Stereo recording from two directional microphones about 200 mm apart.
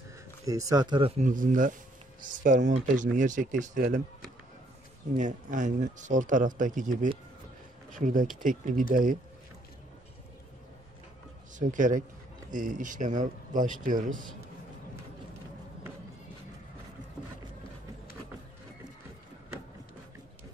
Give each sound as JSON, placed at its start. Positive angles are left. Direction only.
{"t": 0.5, "sound": "speech", "side_deg": -15}
{"t": 1.2, "sound": "speech", "side_deg": -40}
{"t": 5.1, "sound": "speech", "side_deg": -40}
{"t": 11.5, "sound": "speech", "side_deg": -40}